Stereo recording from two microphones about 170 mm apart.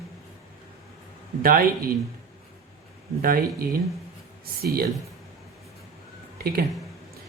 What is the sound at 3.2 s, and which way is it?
Speech, 60° right (ahead or behind).